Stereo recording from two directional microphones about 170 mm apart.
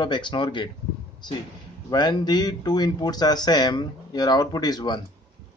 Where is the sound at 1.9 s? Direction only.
25° left (ahead or behind).